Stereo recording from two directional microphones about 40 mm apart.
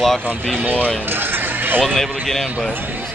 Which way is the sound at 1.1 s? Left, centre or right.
Right.